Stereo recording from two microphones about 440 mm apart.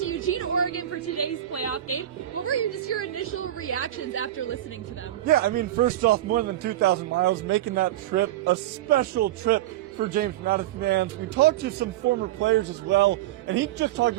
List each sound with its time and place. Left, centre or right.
0.0 s speech: left
5.3 s a man's voice: centre